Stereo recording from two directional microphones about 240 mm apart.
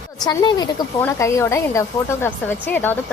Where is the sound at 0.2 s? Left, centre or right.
Centre.